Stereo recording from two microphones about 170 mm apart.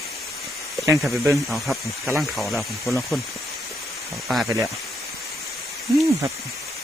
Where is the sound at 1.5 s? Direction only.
Centre (ahead or behind).